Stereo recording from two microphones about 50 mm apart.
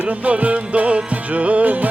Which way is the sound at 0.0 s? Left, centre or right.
Right.